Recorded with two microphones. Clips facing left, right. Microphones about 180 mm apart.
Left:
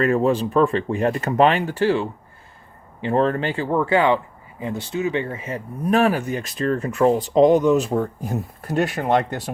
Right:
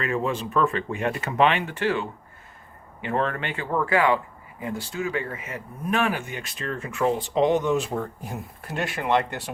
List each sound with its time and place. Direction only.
0.0 s speech: 40° left (ahead or behind)